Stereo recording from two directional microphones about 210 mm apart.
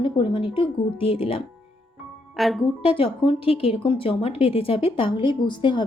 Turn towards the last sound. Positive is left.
turn(degrees=20)  # may be behind; listen again after turning